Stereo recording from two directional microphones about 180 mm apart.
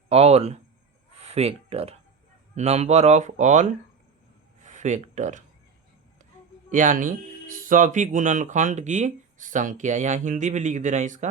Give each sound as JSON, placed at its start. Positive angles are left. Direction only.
{"t": 0.1, "sound": "speech", "side_deg": -35}
{"t": 6.7, "sound": "speech", "side_deg": -45}